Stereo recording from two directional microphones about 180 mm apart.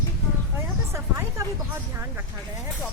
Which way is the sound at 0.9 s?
15° right (ahead or behind).